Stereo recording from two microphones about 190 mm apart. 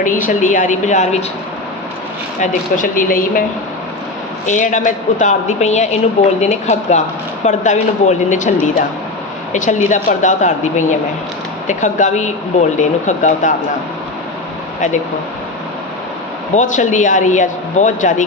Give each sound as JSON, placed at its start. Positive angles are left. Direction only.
{"t": 0.0, "sound": "speech", "side_deg": 45}
{"t": 2.4, "sound": "speech", "side_deg": 45}
{"t": 4.4, "sound": "speech", "side_deg": 40}
{"t": 16.6, "sound": "speech", "side_deg": 40}